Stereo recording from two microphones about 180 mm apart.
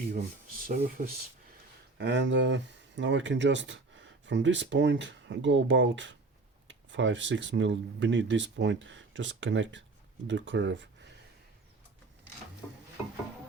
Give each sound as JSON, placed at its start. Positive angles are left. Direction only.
{"t": 0.1, "sound": "speech", "side_deg": -50}
{"t": 2.0, "sound": "speech", "side_deg": -80}